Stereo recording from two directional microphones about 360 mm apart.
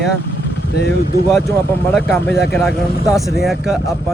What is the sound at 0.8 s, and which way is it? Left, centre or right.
Speech, left.